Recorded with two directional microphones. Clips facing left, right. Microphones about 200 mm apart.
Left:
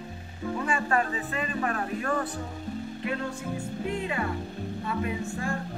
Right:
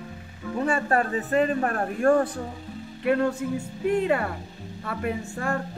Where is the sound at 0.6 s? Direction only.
40° right (ahead or behind).